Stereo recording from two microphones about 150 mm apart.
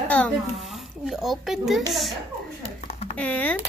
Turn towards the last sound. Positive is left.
turn(degrees=10)  # may be behind; listen again after turning